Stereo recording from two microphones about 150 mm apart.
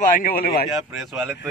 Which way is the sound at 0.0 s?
70° left (ahead or behind).